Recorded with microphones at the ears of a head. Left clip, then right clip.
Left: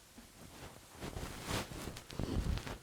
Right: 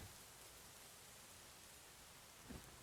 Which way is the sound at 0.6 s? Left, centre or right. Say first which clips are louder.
Left 10 dB; left.